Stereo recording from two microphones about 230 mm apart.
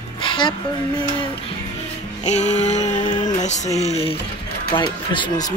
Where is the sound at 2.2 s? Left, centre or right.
Left.